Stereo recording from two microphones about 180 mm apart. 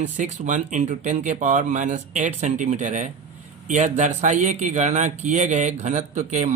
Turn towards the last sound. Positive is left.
turn(degrees=-40)  # may be behind; listen again after turning